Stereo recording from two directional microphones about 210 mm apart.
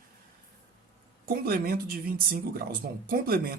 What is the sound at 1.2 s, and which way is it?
Speech, 45° right (ahead or behind).